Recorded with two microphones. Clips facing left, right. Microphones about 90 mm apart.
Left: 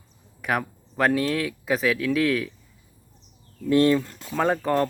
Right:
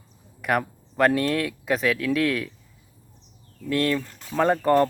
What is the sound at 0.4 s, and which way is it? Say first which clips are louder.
Speech: right 2 dB; centre (ahead or behind).